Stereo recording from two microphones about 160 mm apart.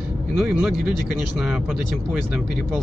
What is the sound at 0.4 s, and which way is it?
Speech, 5° right (ahead or behind).